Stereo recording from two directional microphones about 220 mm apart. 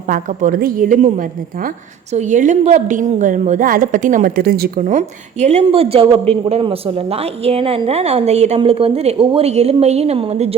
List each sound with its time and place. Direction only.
0.1 s a woman's voice: 40° right (ahead or behind)